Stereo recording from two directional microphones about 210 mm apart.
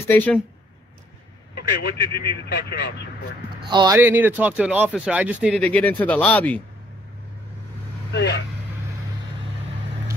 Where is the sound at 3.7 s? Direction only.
20° right (ahead or behind).